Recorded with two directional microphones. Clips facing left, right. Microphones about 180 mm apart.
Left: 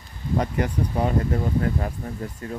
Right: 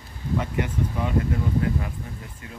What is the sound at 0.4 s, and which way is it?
Speech, 40° left (ahead or behind).